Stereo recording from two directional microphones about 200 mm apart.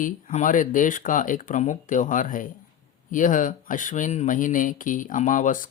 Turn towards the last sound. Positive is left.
turn(degrees=40)  # may be behind; listen again after turning